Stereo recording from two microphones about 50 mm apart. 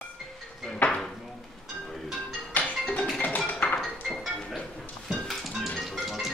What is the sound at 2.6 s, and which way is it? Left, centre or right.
Music, left.